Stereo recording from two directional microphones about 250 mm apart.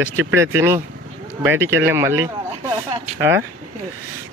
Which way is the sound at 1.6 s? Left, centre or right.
Right.